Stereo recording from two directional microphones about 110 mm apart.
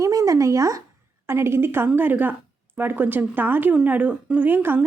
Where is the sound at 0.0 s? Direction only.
30° right (ahead or behind).